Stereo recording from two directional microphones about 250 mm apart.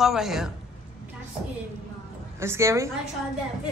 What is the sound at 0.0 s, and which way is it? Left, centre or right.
Speech, centre.